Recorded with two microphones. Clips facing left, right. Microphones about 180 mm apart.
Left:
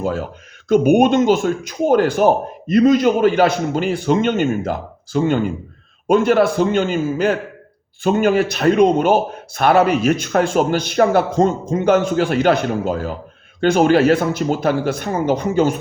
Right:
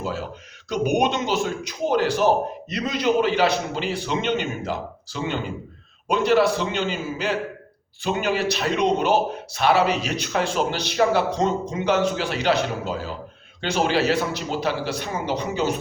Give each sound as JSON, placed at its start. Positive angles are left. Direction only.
{"t": 0.0, "sound": "speech", "side_deg": 50}